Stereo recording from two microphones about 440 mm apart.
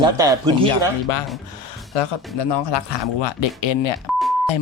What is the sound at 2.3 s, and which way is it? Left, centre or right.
Speech, left.